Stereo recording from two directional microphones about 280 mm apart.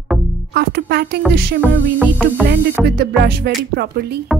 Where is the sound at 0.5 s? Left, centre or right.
Right.